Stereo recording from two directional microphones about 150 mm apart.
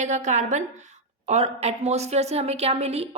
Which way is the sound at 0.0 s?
55° right (ahead or behind).